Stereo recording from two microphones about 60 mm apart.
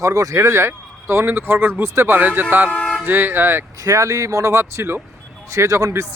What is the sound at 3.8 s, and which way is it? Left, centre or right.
Speech, right.